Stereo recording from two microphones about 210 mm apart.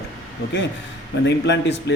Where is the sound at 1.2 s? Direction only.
55° left (ahead or behind).